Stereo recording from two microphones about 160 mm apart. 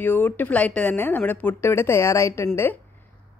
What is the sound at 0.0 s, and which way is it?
Speech, 10° left (ahead or behind).